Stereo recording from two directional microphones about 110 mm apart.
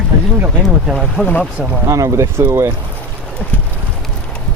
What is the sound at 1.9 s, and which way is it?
Speech, 30° right (ahead or behind).